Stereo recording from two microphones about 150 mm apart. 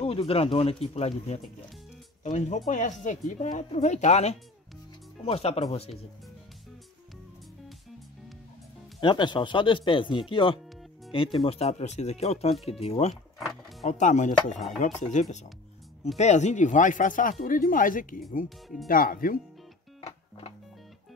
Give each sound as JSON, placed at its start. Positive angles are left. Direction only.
{"t": 0.0, "sound": "speech", "side_deg": 40}
{"t": 2.2, "sound": "speech", "side_deg": 55}
{"t": 9.0, "sound": "speech", "side_deg": 30}
{"t": 13.5, "sound": "music", "side_deg": 0}
{"t": 13.8, "sound": "speech", "side_deg": 55}
{"t": 20.0, "sound": "music", "side_deg": 45}